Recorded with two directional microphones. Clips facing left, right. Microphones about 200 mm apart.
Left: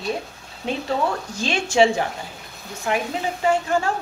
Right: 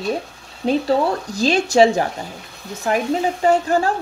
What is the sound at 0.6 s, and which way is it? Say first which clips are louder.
Speech: right 6 dB; 35° right (ahead or behind).